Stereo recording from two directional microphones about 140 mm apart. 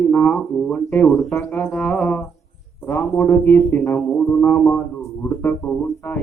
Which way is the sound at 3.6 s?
20° left (ahead or behind).